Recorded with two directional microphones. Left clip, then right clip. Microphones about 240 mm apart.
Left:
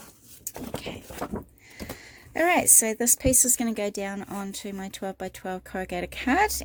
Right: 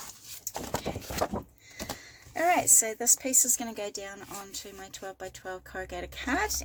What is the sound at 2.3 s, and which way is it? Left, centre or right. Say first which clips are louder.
Speech: left 3 dB; left.